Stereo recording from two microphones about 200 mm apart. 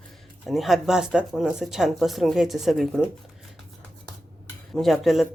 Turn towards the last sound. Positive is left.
turn(degrees=0)  # may be behind; listen again after turning